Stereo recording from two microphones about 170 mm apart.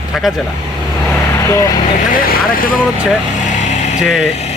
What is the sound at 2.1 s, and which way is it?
Speech, 60° left (ahead or behind).